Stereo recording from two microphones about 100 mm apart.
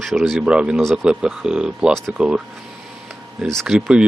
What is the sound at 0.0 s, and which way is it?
Speech, centre (ahead or behind).